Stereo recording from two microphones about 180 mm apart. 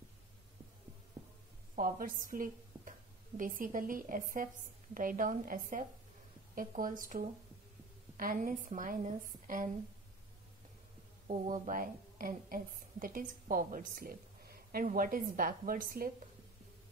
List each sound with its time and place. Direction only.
1.8 s a woman's voice: 50° right (ahead or behind)
11.2 s a woman's voice: 45° right (ahead or behind)